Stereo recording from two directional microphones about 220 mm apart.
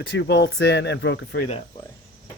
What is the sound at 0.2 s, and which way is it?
Speech, 50° left (ahead or behind).